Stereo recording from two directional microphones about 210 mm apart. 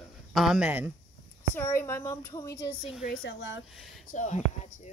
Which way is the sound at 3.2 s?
60° left (ahead or behind).